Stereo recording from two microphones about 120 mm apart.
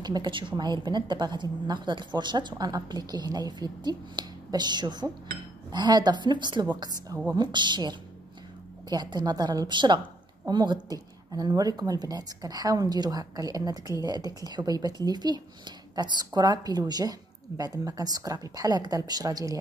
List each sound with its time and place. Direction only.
0.0 s a woman's voice: 35° right (ahead or behind)